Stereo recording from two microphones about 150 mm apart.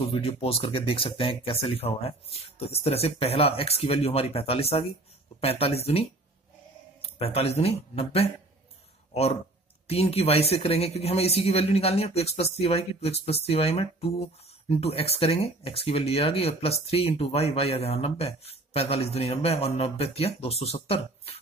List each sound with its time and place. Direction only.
0.1 s speech: 40° left (ahead or behind)